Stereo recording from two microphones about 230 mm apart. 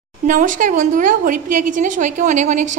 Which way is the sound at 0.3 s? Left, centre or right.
Right.